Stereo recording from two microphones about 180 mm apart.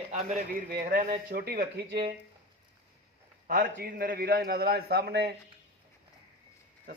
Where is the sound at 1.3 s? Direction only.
60° right (ahead or behind).